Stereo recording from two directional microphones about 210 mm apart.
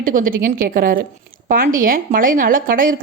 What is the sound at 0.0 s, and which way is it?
A woman's voice, 40° right (ahead or behind).